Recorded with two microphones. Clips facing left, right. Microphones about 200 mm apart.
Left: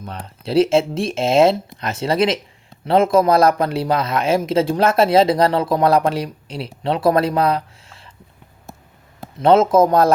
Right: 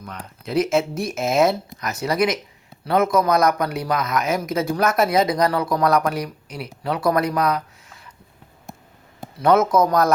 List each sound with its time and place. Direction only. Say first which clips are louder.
0.0 s speech: left 4 dB; 30° left (ahead or behind)
9.4 s speech: left 4 dB; 25° left (ahead or behind)